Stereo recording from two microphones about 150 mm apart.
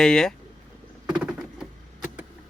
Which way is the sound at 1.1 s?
5° right (ahead or behind).